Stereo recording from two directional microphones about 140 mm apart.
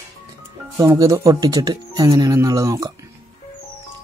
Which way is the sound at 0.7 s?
25° right (ahead or behind).